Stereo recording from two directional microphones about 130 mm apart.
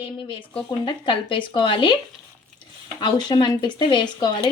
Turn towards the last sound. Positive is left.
turn(degrees=35)  # may be behind; listen again after turning